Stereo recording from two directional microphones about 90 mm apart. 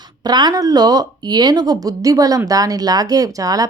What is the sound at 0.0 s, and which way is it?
Speech, 50° right (ahead or behind).